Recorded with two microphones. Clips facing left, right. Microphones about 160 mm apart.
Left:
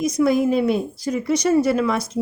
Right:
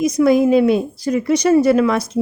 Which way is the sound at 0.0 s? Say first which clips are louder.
Right 4 dB; 85° right.